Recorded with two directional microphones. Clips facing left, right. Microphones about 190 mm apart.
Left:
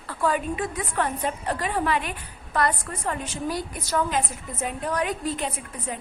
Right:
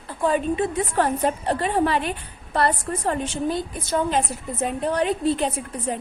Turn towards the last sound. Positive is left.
turn(degrees=-30)  # may be behind; listen again after turning